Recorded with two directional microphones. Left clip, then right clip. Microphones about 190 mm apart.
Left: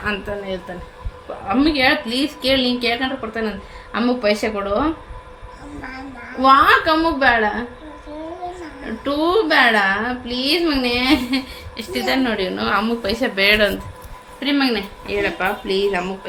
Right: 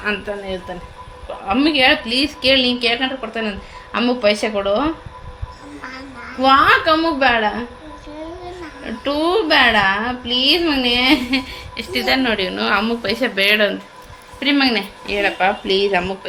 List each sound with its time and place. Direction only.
0.0 s speech: 15° right (ahead or behind)
1.5 s a woman's voice: 25° right (ahead or behind)
6.4 s a woman's voice: 20° right (ahead or behind)
8.8 s a woman's voice: 20° right (ahead or behind)
14.3 s speech: 25° right (ahead or behind)